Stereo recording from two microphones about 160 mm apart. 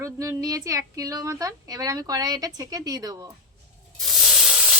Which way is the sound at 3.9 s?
Centre (ahead or behind).